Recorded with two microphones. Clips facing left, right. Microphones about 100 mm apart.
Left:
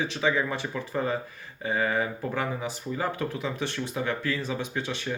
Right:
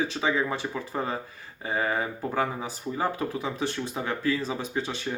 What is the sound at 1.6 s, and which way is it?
Speech, 30° right (ahead or behind).